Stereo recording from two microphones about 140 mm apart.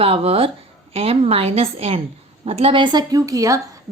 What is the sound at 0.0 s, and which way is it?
A woman's voice, 45° right (ahead or behind).